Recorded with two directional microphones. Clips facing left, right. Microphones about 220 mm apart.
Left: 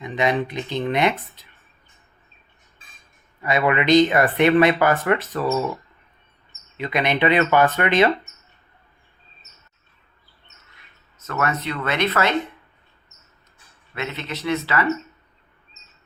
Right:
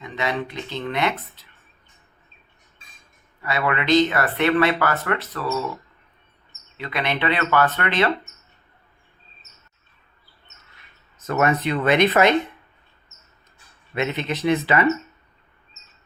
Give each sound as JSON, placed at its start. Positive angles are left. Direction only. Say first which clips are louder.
{"t": 0.0, "sound": "speech", "louder": "left 5 dB", "side_deg": 15}
{"t": 3.4, "sound": "speech", "louder": "left 4 dB", "side_deg": 15}
{"t": 6.7, "sound": "speech", "louder": "left 4 dB", "side_deg": 15}
{"t": 11.3, "sound": "speech", "louder": "right 4 dB", "side_deg": -20}
{"t": 13.9, "sound": "speech", "louder": "right 5 dB", "side_deg": -15}